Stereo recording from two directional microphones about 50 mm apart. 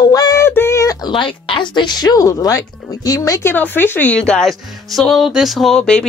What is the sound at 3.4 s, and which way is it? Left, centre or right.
Speech, left.